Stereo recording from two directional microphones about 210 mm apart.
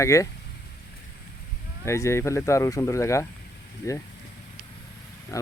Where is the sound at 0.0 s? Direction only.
15° left (ahead or behind).